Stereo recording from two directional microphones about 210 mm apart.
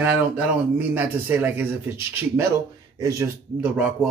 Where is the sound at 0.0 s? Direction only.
10° right (ahead or behind).